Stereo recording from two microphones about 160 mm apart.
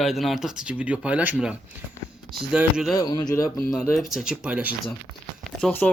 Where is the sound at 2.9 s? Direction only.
25° left (ahead or behind).